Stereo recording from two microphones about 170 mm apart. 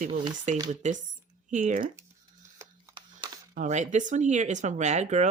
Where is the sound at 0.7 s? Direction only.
45° right (ahead or behind).